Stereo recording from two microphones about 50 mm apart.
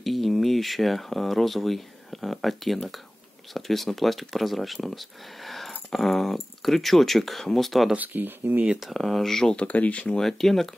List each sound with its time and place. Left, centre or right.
0.0 s speech: centre
7.9 s speech: right
8.8 s speech: centre
9.7 s speech: left
10.1 s speech: centre